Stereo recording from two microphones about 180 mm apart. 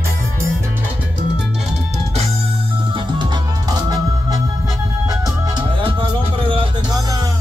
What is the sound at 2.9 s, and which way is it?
Music, 25° right (ahead or behind).